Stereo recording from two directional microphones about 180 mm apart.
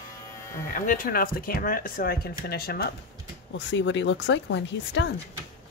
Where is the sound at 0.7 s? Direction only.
50° left (ahead or behind).